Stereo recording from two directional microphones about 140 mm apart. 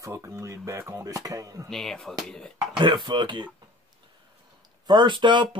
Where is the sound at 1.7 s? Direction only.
5° left (ahead or behind).